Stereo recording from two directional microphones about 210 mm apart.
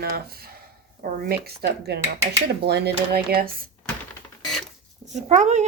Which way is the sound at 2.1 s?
10° right (ahead or behind).